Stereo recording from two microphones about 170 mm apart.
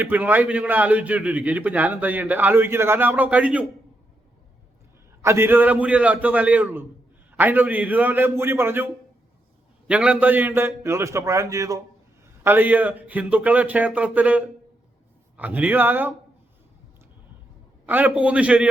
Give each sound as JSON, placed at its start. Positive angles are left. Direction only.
{"t": 0.0, "sound": "a man's voice", "side_deg": -10}
{"t": 5.2, "sound": "a man's voice", "side_deg": -15}
{"t": 17.8, "sound": "a man's voice", "side_deg": -10}